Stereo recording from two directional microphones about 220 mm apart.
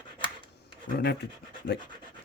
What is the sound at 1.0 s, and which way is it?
Speech, 50° left (ahead or behind).